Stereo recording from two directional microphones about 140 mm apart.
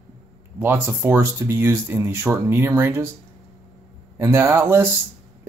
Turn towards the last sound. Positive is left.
turn(degrees=-20)  # may be behind; listen again after turning